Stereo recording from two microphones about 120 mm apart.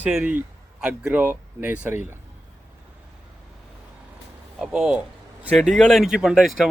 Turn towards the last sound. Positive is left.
turn(degrees=0)  # may be behind; listen again after turning